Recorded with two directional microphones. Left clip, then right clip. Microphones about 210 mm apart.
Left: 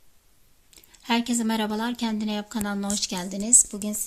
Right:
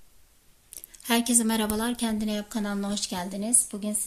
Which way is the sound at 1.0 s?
35° left (ahead or behind).